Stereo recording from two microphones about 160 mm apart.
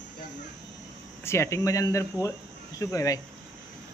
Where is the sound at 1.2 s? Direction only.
15° left (ahead or behind).